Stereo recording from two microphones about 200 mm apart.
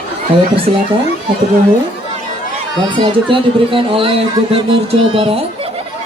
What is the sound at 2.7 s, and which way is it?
Speech, 25° right (ahead or behind).